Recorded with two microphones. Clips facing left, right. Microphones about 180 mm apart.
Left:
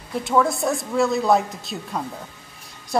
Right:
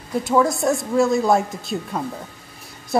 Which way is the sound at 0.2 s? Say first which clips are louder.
Right 2 dB; centre (ahead or behind).